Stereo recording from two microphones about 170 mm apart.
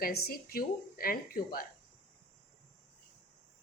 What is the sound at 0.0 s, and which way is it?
A woman's voice, 65° left (ahead or behind).